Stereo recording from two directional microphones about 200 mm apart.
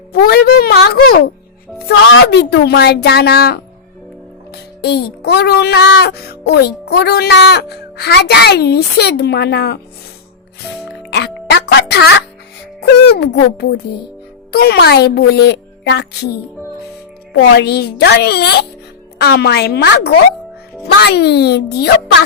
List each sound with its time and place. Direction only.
0.1 s speech: 50° left (ahead or behind)
2.0 s speech: 60° left (ahead or behind)
4.8 s speech: 55° left (ahead or behind)
11.1 s music: 55° left (ahead or behind)
13.1 s speech: 55° left (ahead or behind)
17.3 s speech: 55° left (ahead or behind)